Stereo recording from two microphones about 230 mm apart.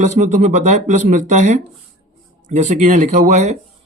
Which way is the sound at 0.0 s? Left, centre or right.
Right.